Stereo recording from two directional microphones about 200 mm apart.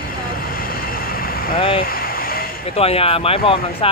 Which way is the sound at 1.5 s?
25° left (ahead or behind).